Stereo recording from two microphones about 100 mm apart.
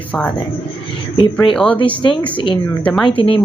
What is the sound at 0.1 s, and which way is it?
Speech, 5° left (ahead or behind).